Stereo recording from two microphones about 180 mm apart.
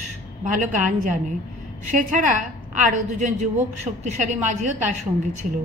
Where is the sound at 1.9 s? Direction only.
45° right (ahead or behind).